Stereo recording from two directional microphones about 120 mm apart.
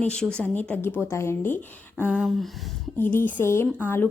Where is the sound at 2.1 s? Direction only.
5° right (ahead or behind).